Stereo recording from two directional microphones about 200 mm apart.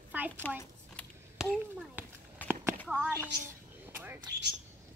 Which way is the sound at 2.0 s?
10° right (ahead or behind).